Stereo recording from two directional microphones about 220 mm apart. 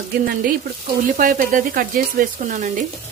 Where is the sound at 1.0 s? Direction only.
35° right (ahead or behind).